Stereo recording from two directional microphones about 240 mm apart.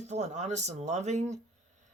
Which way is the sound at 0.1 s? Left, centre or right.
Right.